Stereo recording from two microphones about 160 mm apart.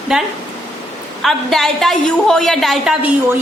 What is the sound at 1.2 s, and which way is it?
A woman's voice, centre (ahead or behind).